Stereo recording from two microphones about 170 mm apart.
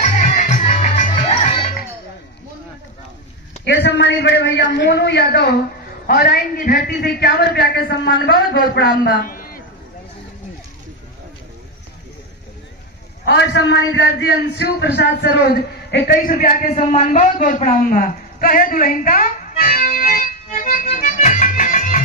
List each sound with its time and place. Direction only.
0.0 s music: 45° left (ahead or behind)
3.6 s a man's voice: 90° left; by 5.5 s 75° left (ahead or behind)
6.0 s a man's voice: 60° left (ahead or behind)
13.2 s a man's voice: 90° left; by 22.0 s 50° left (ahead or behind)